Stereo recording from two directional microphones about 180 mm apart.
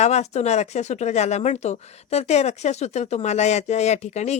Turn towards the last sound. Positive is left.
turn(degrees=40)  # may be behind; listen again after turning